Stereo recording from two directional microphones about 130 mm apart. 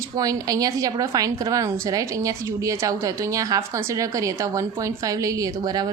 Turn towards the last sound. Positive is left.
turn(degrees=-30)  # may be behind; listen again after turning